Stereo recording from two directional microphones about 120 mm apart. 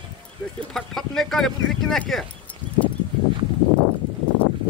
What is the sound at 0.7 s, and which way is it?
Speech, 5° left (ahead or behind).